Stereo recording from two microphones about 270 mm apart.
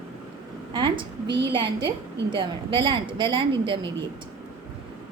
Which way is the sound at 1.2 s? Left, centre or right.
Right.